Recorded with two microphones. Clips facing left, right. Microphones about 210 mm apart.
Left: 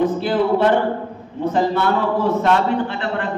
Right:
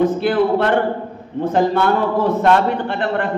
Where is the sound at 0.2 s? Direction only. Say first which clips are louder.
Right 1 dB; 65° right (ahead or behind).